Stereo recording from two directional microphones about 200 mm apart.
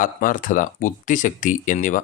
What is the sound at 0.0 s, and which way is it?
Speech, 40° left (ahead or behind).